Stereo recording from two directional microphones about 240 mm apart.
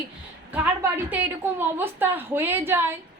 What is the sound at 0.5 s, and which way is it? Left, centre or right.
A woman's voice, centre.